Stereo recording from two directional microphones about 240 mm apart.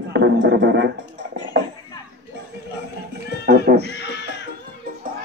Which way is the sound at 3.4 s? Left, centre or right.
Right.